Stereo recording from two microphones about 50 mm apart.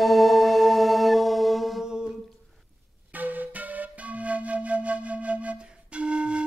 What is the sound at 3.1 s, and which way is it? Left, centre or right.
Music, right.